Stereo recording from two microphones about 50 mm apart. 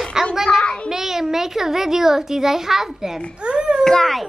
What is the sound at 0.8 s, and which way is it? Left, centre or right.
A child's voice, centre.